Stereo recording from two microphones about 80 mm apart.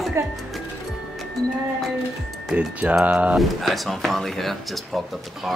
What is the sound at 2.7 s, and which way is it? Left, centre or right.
Mantra, centre.